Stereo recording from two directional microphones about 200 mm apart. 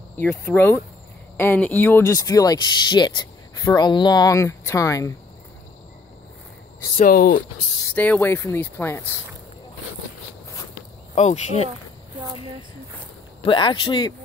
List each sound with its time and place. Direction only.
0.2 s speech: 10° left (ahead or behind)
7.0 s speech: 45° left (ahead or behind)
7.9 s speech: 10° left (ahead or behind)
11.1 s speech: 35° left (ahead or behind)
13.4 s speech: 25° left (ahead or behind)